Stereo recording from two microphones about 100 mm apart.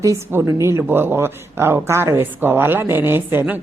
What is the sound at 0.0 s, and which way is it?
Speech, 25° right (ahead or behind).